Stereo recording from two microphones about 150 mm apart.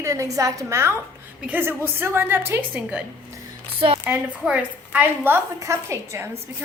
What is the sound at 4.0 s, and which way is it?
A woman's voice, 5° right (ahead or behind).